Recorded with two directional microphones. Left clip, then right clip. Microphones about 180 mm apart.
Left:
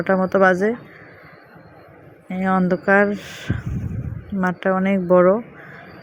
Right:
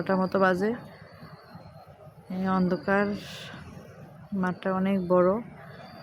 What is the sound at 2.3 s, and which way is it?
A woman's voice, 25° left (ahead or behind).